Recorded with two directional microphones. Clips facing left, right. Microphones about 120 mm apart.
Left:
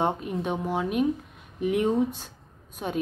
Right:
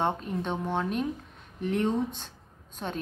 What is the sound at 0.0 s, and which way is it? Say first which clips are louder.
A woman's voice: left 2 dB; 10° left (ahead or behind).